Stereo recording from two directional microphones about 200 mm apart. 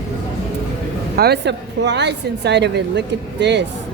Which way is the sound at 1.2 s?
55° right (ahead or behind).